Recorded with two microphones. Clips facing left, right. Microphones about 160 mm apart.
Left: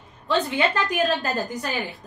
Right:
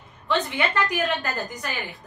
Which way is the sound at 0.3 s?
30° left (ahead or behind).